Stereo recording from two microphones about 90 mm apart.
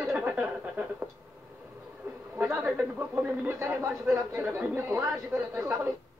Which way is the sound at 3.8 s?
5° right (ahead or behind).